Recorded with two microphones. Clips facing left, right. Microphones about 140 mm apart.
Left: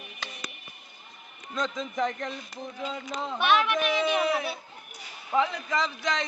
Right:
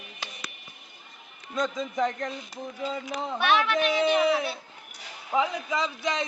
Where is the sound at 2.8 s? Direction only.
10° right (ahead or behind).